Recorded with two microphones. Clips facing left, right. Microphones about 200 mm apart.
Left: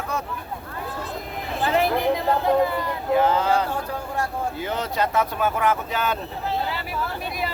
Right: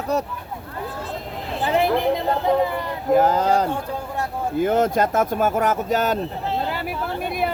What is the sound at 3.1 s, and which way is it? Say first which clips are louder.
A man's voice: right 3 dB; 40° right (ahead or behind).